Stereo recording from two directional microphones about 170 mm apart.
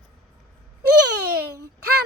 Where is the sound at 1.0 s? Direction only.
80° right.